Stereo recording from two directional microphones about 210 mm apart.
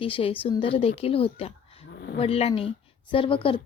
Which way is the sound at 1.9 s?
50° left (ahead or behind).